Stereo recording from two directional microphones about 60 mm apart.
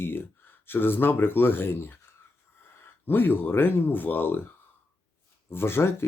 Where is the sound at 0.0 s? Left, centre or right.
Left.